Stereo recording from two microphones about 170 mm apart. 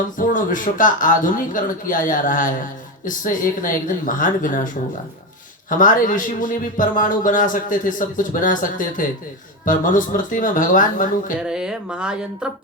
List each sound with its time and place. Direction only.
0.2 s a man's voice: 50° left (ahead or behind)
11.4 s speech: 5° right (ahead or behind)